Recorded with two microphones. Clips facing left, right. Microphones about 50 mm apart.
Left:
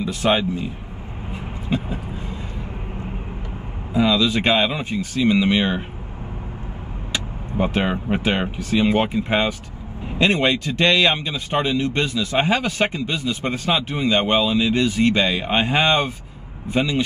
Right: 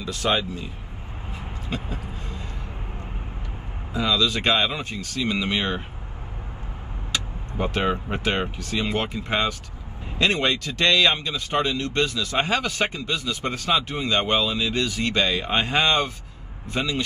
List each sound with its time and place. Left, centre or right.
0.0 s a man's voice: left
3.9 s a man's voice: left
7.1 s a man's voice: left